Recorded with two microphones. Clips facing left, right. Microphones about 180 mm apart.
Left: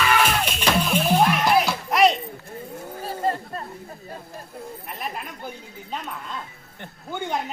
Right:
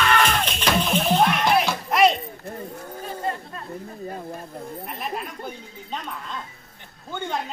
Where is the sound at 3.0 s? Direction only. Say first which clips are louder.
Left 4 dB; 35° left (ahead or behind).